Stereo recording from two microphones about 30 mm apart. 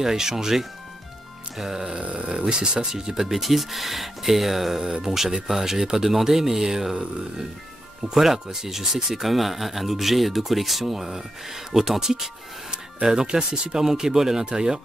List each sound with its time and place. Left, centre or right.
0.0 s speech: centre
2.0 s speech: right
2.3 s speech: right
2.9 s speech: centre
8.0 s speech: centre